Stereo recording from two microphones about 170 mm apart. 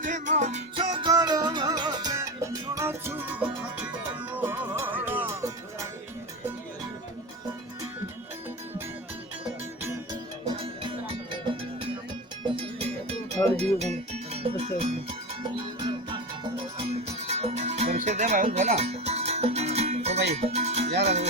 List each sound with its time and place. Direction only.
0.0 s music: 45° right (ahead or behind)
0.8 s music: 30° right (ahead or behind)
10.5 s music: 30° right (ahead or behind)
12.5 s music: 35° right (ahead or behind)
13.6 s speech: 40° right (ahead or behind)
15.8 s music: 30° right (ahead or behind)